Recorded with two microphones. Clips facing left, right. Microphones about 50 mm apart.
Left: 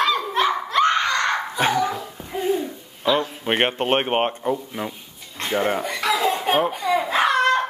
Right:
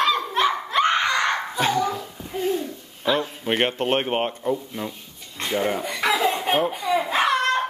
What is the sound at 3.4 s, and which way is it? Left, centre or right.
Speech, left.